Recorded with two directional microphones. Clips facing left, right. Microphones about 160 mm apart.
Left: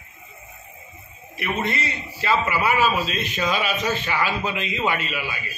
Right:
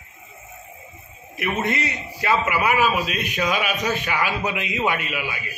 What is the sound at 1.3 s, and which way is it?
A man's voice, 20° right (ahead or behind).